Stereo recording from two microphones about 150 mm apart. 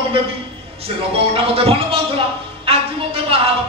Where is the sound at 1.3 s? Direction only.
40° right (ahead or behind).